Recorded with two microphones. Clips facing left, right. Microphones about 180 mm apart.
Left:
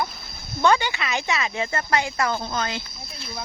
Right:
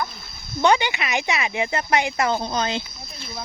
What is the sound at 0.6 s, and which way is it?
Speech, 20° right (ahead or behind).